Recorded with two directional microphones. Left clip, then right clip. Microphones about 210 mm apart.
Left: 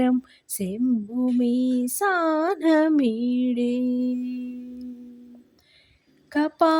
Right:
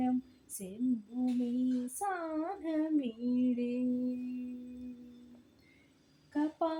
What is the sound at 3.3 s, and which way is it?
Music, 35° left (ahead or behind).